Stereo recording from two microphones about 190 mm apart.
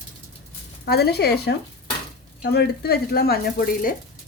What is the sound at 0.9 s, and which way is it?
A woman's voice, 55° left (ahead or behind).